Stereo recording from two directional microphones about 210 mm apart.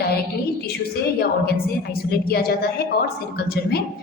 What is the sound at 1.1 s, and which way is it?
A woman's voice, 50° left (ahead or behind).